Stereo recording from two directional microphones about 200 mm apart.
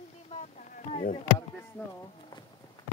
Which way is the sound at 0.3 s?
35° left (ahead or behind).